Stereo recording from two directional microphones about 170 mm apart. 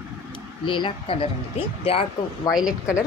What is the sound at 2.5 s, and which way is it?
Speech, 5° right (ahead or behind).